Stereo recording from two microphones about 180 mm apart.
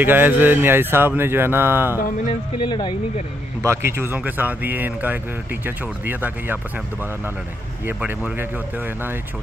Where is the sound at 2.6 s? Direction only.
25° left (ahead or behind).